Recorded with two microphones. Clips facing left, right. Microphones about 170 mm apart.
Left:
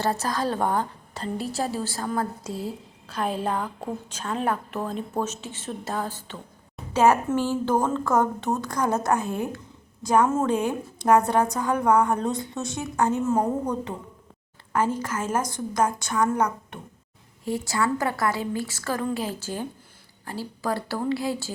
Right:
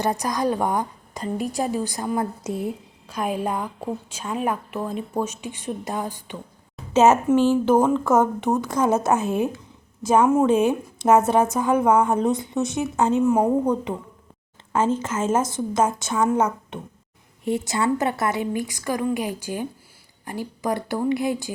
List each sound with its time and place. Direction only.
0.0 s a woman's voice: 15° right (ahead or behind)